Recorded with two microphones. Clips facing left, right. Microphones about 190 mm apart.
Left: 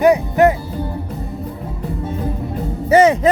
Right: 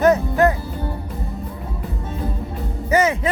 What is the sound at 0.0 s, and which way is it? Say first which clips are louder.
Music: left 3 dB; 15° left (ahead or behind).